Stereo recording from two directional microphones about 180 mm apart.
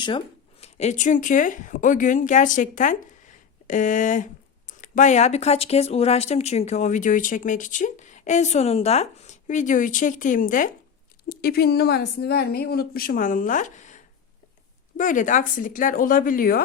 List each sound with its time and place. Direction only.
0.6 s a woman's voice: 40° left (ahead or behind)